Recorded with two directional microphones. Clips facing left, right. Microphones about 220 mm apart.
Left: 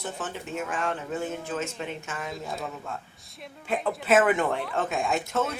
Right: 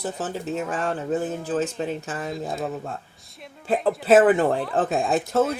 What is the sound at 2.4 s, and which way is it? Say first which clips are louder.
Speech: right 6 dB; 45° right (ahead or behind).